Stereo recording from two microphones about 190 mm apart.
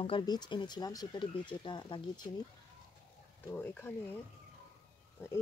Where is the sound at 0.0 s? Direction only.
25° left (ahead or behind).